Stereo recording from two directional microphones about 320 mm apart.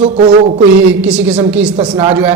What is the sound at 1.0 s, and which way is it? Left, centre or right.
Speech, centre.